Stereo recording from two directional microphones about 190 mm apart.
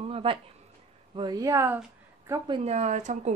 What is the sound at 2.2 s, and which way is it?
Speech, 25° right (ahead or behind).